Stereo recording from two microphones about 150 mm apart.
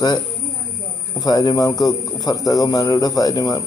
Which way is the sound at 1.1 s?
25° left (ahead or behind).